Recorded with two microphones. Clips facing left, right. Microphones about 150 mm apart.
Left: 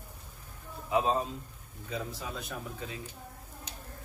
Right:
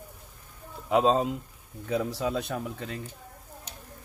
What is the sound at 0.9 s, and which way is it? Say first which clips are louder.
Speech: right 6 dB; 75° right (ahead or behind).